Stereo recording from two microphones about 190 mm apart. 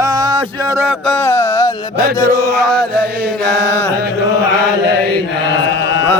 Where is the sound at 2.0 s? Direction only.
55° right (ahead or behind).